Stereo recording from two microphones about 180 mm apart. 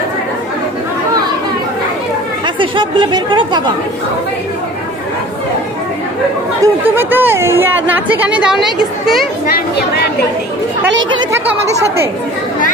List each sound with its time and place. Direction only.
2.4 s speech: 25° right (ahead or behind)
6.6 s speech: 10° right (ahead or behind)